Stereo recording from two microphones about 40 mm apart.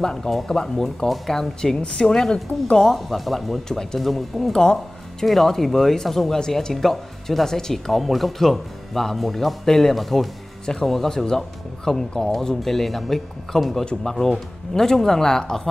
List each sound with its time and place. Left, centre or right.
0.0 s speech: centre
0.8 s speech: centre
3.6 s speech: centre
4.0 s speech: centre
10.6 s speech: centre